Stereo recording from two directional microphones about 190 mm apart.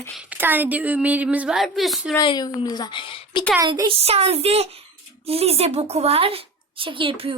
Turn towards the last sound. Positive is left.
turn(degrees=-25)  # may be behind; listen again after turning